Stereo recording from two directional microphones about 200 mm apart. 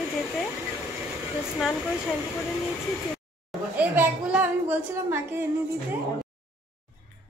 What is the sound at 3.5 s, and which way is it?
A woman's voice, 10° right (ahead or behind).